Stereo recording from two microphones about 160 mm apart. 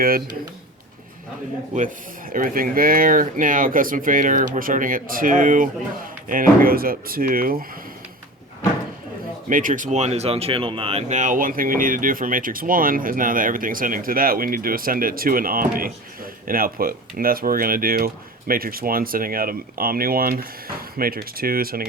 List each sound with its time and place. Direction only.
0.0 s speech: 65° right (ahead or behind)
2.3 s speech: 60° right (ahead or behind)
9.5 s speech: 55° right (ahead or behind)